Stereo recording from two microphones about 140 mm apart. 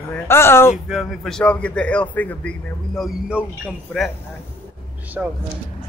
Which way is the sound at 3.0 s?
5° right (ahead or behind).